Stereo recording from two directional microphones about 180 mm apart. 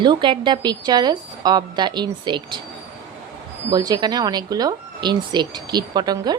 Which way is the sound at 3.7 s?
20° right (ahead or behind).